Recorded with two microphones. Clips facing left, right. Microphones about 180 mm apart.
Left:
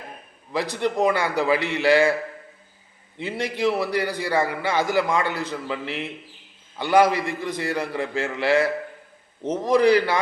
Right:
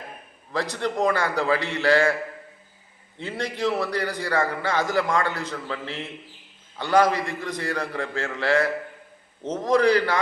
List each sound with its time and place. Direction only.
0.8 s a man's voice: 15° left (ahead or behind)
3.2 s a man's voice: 15° left (ahead or behind)